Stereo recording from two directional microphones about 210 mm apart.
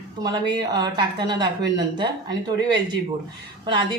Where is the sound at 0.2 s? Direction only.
20° right (ahead or behind).